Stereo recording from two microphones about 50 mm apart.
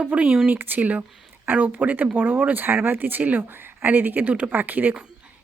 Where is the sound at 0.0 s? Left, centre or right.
Right.